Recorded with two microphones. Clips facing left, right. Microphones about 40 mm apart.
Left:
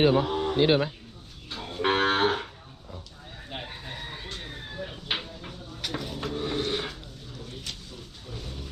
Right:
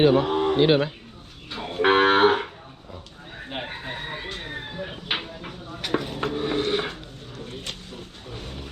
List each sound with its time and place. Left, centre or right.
0.1 s speech: right
0.6 s speech: right
1.5 s cattle: right
3.3 s a sound: right